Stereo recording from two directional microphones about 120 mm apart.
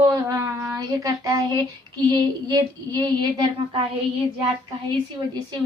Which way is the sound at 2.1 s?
35° right (ahead or behind).